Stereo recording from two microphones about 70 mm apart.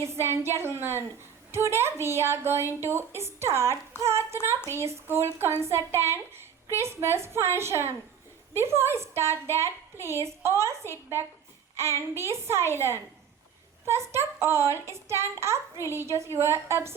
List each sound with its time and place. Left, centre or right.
0.0 s a woman's voice: right